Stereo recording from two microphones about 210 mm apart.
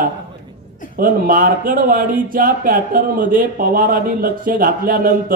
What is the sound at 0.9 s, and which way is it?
Speech, 40° right (ahead or behind).